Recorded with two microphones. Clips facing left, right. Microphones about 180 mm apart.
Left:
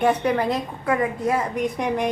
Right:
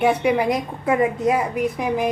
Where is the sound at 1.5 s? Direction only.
Centre (ahead or behind).